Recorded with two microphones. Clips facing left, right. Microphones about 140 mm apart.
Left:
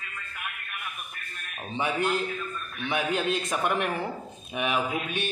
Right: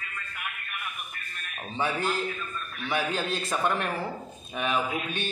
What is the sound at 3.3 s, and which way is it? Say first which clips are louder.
A man's voice: left 1 dB; 15° left (ahead or behind).